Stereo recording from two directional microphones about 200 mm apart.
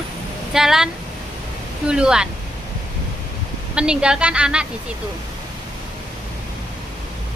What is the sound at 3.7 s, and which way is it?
Speech, 5° right (ahead or behind).